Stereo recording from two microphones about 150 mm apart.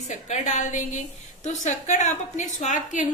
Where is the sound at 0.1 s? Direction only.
55° left (ahead or behind).